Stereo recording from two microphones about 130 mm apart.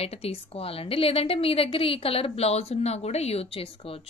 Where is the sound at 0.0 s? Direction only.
50° left (ahead or behind).